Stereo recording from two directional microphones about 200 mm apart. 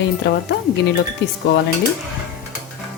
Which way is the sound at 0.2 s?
55° left (ahead or behind).